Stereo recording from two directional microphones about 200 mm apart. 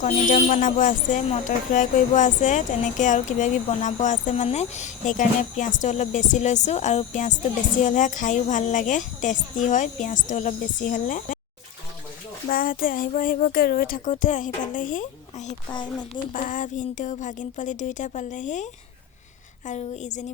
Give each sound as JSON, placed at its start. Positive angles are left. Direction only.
{"t": 0.0, "sound": "a woman's voice", "side_deg": 40}
{"t": 12.5, "sound": "speech", "side_deg": 45}
{"t": 15.7, "sound": "speech", "side_deg": 20}
{"t": 16.3, "sound": "a woman's voice", "side_deg": 40}